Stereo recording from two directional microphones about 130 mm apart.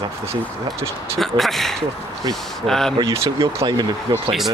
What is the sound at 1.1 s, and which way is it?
Speech, centre (ahead or behind).